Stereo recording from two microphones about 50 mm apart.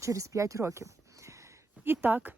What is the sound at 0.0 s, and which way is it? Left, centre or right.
Speech, right.